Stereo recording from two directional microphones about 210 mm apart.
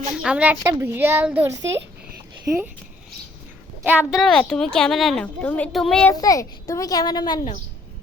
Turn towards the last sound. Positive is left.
turn(degrees=20)  # may be behind; listen again after turning